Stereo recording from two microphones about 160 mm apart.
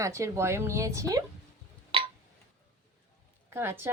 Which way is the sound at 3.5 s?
15° right (ahead or behind).